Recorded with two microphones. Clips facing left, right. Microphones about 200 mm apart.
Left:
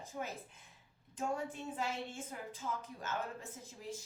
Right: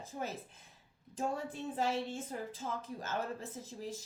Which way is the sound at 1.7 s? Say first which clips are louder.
Right 9 dB; 35° right (ahead or behind).